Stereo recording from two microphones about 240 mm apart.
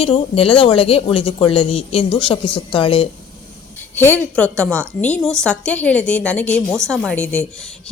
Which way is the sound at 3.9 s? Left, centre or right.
Centre.